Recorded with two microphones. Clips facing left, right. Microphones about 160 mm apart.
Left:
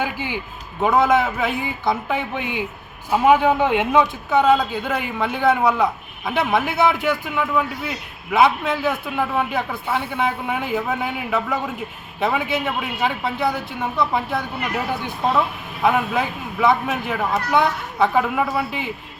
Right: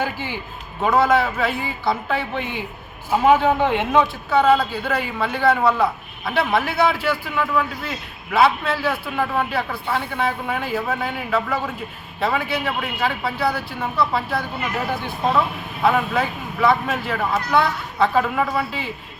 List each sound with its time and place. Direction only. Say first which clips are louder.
0.0 s a man's voice: left 1 dB; 15° left (ahead or behind)